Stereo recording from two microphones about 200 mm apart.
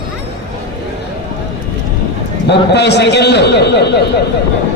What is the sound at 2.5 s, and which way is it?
A man's voice, 55° left (ahead or behind).